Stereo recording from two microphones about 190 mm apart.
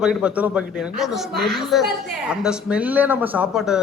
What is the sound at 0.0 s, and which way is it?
Speech, 5° right (ahead or behind).